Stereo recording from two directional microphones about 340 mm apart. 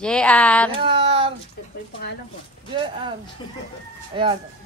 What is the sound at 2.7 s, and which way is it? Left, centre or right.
Child singing, centre.